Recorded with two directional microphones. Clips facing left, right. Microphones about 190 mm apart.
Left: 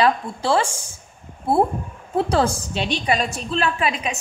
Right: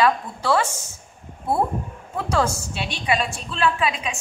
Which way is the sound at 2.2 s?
35° left (ahead or behind).